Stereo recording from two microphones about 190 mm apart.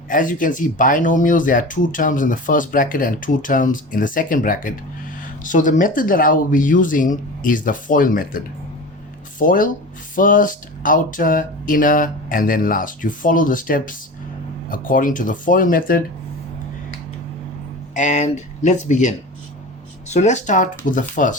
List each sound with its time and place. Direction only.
0.1 s speech: 45° left (ahead or behind)
9.4 s speech: 45° left (ahead or behind)
17.9 s speech: 40° left (ahead or behind)